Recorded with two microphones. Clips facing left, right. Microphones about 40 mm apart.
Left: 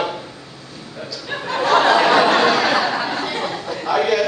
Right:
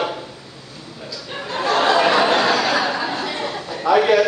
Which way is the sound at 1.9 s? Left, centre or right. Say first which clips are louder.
Right 1 dB; left.